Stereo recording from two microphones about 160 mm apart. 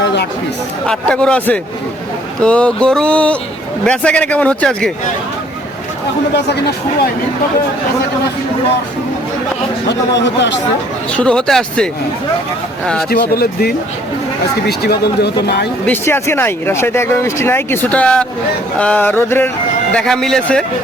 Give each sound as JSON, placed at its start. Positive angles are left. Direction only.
{"t": 0.9, "sound": "speech", "side_deg": 5}
{"t": 11.1, "sound": "speech", "side_deg": 5}
{"t": 13.1, "sound": "speech", "side_deg": 70}
{"t": 14.7, "sound": "speech", "side_deg": 90}
{"t": 15.9, "sound": "speech", "side_deg": 15}